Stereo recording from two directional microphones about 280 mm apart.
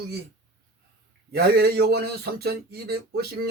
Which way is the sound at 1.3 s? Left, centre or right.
Right.